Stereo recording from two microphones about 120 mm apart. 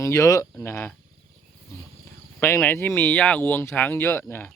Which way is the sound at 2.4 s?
20° left (ahead or behind).